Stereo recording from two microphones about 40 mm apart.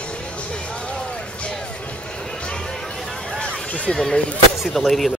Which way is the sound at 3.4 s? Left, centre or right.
Left.